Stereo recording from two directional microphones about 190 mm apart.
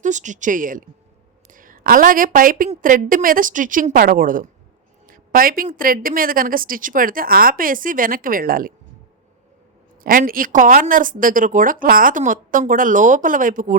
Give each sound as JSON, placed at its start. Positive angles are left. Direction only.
{"t": 0.0, "sound": "speech", "side_deg": -40}
{"t": 10.0, "sound": "speech", "side_deg": -50}